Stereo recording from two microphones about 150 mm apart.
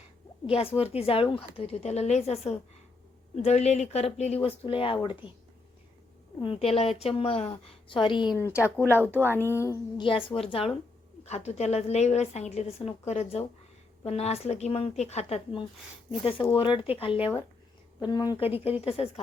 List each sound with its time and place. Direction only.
0.8 s a woman's voice: 40° left (ahead or behind)
6.4 s speech: 40° left (ahead or behind)
8.4 s speech: 15° left (ahead or behind)
9.0 s speech: 15° right (ahead or behind)
9.3 s speech: 15° left (ahead or behind)
10.2 s a woman's voice: 40° left (ahead or behind)